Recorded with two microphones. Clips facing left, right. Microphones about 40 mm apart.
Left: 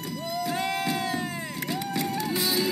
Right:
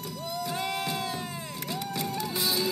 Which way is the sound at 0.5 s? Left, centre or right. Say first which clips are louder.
Left 4 dB; centre.